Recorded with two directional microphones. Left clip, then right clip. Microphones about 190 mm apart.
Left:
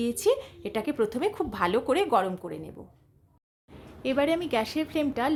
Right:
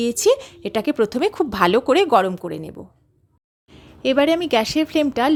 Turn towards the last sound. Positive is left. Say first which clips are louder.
# right 9 dB
turn(degrees=-40)  # may be behind; listen again after turning